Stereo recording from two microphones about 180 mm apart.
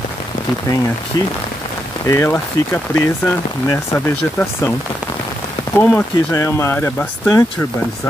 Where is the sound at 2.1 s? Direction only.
15° left (ahead or behind).